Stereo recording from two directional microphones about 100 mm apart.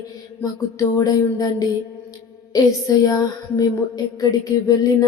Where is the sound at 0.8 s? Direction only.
35° left (ahead or behind).